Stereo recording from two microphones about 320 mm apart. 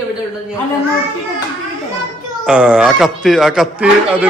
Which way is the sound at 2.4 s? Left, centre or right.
Centre.